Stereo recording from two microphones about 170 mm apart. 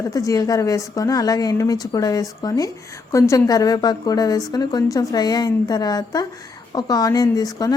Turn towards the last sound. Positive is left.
turn(degrees=20)  # may be behind; listen again after turning